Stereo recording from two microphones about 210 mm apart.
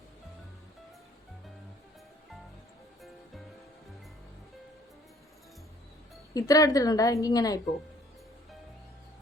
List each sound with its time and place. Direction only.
6.3 s a woman's voice: 15° left (ahead or behind)